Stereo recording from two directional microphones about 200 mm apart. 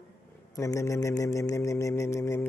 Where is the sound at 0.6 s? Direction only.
15° left (ahead or behind).